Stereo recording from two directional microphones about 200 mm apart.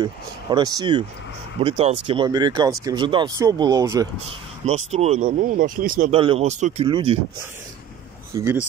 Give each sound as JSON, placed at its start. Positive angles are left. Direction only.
{"t": 0.0, "sound": "speech", "side_deg": -20}
{"t": 4.6, "sound": "speech", "side_deg": -35}
{"t": 6.1, "sound": "speech", "side_deg": -30}
{"t": 8.3, "sound": "speech", "side_deg": -15}